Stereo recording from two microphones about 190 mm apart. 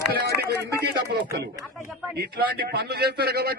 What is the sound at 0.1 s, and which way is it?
Speech, 55° right (ahead or behind).